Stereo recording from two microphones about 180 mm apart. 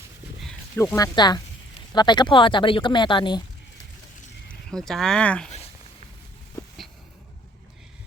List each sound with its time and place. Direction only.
0.8 s speech: 15° left (ahead or behind)
4.7 s speech: centre (ahead or behind)